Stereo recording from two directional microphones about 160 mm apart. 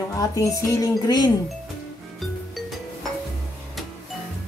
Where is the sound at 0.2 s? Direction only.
20° left (ahead or behind).